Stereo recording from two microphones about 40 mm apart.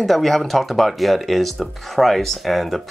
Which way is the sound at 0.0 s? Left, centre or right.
Centre.